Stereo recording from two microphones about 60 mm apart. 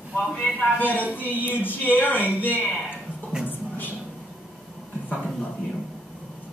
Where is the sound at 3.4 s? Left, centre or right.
Left.